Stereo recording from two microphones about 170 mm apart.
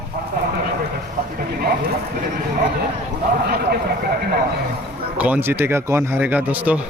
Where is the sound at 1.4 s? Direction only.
65° right (ahead or behind).